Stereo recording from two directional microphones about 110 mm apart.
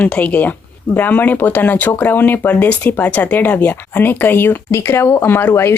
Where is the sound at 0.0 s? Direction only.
15° left (ahead or behind).